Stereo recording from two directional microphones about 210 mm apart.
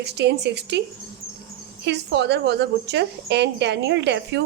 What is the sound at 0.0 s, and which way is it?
Speech, 50° right (ahead or behind).